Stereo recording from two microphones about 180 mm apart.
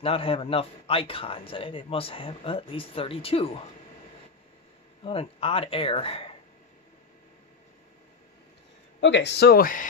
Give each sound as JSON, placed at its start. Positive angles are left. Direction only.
{"t": 0.0, "sound": "a man's voice", "side_deg": 30}
{"t": 5.0, "sound": "a man's voice", "side_deg": 30}
{"t": 9.0, "sound": "speech", "side_deg": 80}